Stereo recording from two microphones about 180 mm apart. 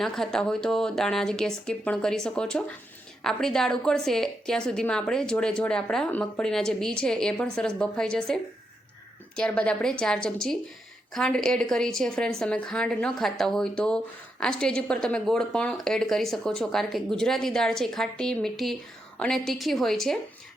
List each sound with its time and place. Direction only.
0.0 s a woman's voice: centre (ahead or behind)